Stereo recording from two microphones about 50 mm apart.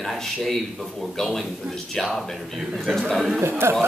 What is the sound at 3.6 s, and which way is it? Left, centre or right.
Speech, right.